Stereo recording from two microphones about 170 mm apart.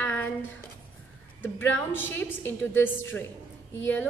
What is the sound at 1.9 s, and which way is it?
A woman's voice, 10° left (ahead or behind).